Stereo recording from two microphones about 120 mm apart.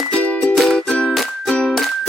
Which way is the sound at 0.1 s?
10° left (ahead or behind).